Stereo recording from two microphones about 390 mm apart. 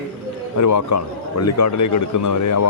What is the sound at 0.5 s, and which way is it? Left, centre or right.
A man's voice, left.